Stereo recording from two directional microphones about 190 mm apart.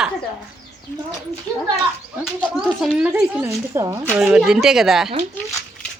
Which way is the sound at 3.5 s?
15° right (ahead or behind).